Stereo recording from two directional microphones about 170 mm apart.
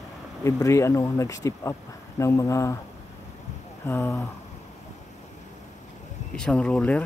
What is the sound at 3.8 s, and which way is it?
Speech, 15° left (ahead or behind).